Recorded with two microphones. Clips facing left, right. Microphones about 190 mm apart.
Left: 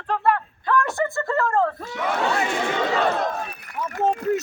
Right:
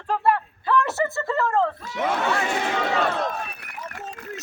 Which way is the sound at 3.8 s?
70° left (ahead or behind).